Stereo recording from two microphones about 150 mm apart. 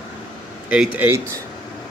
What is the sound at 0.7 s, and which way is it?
Speech, 10° right (ahead or behind).